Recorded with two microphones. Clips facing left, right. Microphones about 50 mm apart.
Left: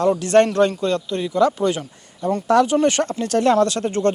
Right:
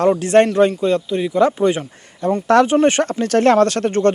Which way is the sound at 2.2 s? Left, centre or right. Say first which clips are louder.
Right 3 dB; right.